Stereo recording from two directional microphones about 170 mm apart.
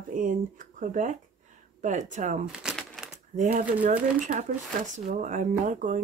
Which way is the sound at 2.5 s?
Centre (ahead or behind).